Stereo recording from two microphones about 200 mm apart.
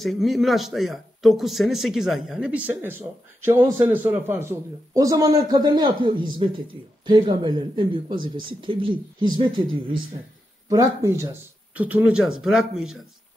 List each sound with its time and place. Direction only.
0.0 s speech: centre (ahead or behind); by 9.3 s 25° right (ahead or behind)
10.7 s speech: 15° right (ahead or behind)